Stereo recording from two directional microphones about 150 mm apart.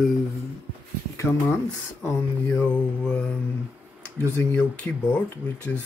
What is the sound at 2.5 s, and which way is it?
Mantra, 10° left (ahead or behind).